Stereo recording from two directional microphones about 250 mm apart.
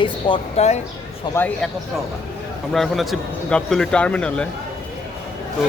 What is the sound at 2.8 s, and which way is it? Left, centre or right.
Speech, centre.